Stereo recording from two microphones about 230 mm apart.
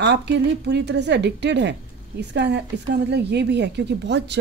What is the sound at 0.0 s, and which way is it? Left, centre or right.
Speech, right.